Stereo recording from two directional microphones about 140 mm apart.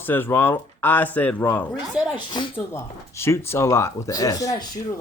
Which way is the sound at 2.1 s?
35° left (ahead or behind).